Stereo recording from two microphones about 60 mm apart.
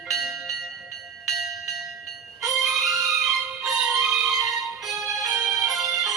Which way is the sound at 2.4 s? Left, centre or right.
Centre.